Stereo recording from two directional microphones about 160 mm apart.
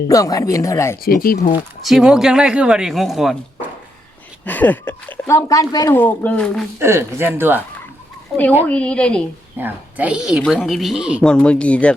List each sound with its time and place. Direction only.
0.1 s speech: 20° left (ahead or behind)
1.0 s speech: 65° left (ahead or behind)
1.8 s a woman's voice: centre (ahead or behind)
4.4 s speech: 10° left (ahead or behind)
6.7 s speech: 15° right (ahead or behind)
8.6 s speech: 5° left (ahead or behind)
9.6 s a woman's voice: 10° right (ahead or behind)
11.3 s speech: 5° left (ahead or behind)